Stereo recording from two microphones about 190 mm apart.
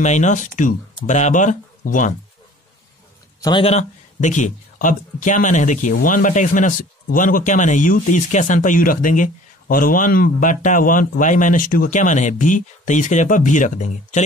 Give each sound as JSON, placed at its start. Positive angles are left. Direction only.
{"t": 0.0, "sound": "speech", "side_deg": 40}
{"t": 3.3, "sound": "a man's voice", "side_deg": 20}
{"t": 3.6, "sound": "speech", "side_deg": 40}